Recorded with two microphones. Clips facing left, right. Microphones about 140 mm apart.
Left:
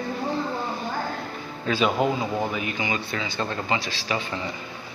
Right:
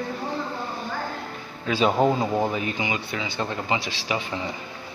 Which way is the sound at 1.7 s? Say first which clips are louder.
Right 3 dB; 30° right (ahead or behind).